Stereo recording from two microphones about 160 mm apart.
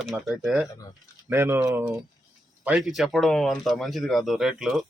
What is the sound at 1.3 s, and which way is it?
Speech, 15° right (ahead or behind).